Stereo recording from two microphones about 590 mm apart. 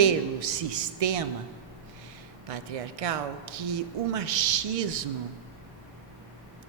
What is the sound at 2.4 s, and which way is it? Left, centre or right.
Speech, right.